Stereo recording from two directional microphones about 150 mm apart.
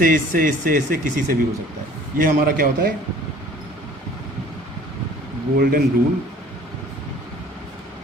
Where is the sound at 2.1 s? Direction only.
70° right (ahead or behind).